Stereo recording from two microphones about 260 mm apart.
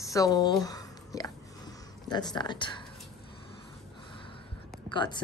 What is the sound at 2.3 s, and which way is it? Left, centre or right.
Speech, centre.